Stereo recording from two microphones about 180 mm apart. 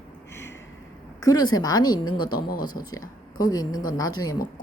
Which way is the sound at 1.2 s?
20° left (ahead or behind).